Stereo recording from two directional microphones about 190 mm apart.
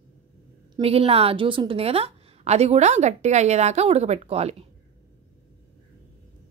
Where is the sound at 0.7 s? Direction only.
30° right (ahead or behind).